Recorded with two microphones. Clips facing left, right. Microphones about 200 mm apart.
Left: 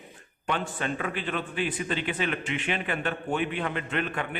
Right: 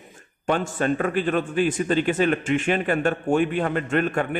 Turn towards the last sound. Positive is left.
turn(degrees=-45)  # may be behind; listen again after turning